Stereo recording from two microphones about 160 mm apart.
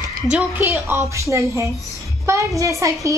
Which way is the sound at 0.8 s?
15° right (ahead or behind).